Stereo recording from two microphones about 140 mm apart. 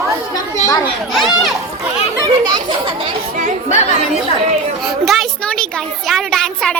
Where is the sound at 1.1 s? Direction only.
Centre (ahead or behind).